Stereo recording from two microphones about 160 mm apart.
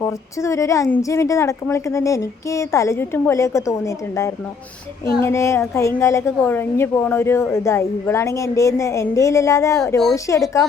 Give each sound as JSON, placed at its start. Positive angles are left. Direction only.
{"t": 0.0, "sound": "a woman's voice", "side_deg": 20}